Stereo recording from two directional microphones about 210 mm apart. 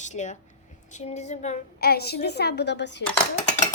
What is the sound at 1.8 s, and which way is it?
Child singing, 50° left (ahead or behind).